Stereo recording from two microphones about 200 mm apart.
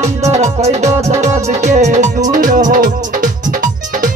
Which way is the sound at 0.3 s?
35° right (ahead or behind).